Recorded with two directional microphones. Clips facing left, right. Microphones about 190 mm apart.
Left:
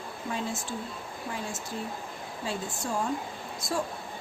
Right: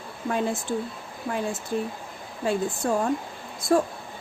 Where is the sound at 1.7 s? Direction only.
60° right (ahead or behind).